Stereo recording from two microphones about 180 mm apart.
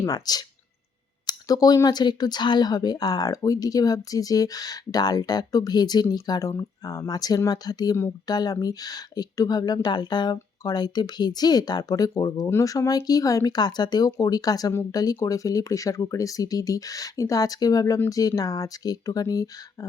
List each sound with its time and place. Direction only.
0.0 s speech: 20° left (ahead or behind)